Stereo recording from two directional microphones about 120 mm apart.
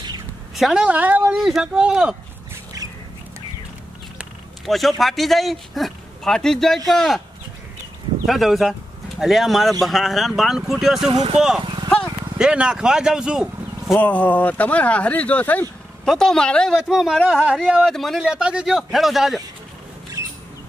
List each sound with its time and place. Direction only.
0.6 s speech: 5° right (ahead or behind)
4.6 s speech: centre (ahead or behind)
8.3 s speech: centre (ahead or behind)
11.1 s speech: 65° right (ahead or behind)
11.6 s vehicle: 40° right (ahead or behind)
12.4 s speech: 5° right (ahead or behind)
13.9 s speech: 15° left (ahead or behind)
18.2 s speech: 10° right (ahead or behind)